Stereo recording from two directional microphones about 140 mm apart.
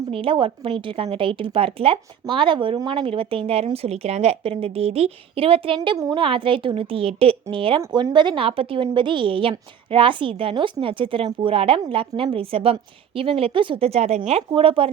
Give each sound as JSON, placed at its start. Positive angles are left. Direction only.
{"t": 0.1, "sound": "speech", "side_deg": -40}